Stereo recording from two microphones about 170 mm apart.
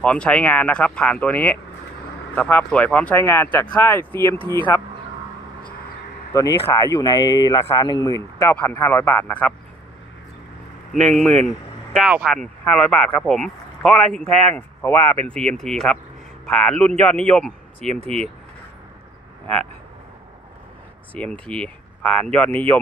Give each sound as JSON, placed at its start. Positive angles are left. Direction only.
{"t": 0.0, "sound": "speech", "side_deg": 5}
{"t": 6.3, "sound": "speech", "side_deg": 20}
{"t": 10.9, "sound": "speech", "side_deg": 0}
{"t": 19.4, "sound": "speech", "side_deg": 5}
{"t": 21.1, "sound": "speech", "side_deg": 5}